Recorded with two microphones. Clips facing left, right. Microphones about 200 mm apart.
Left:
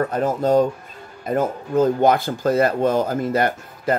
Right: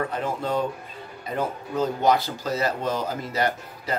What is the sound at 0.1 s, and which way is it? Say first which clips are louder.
Speech: left 9 dB; 40° left (ahead or behind).